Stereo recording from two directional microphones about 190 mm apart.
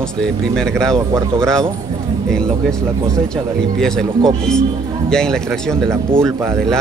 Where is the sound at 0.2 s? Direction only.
5° left (ahead or behind).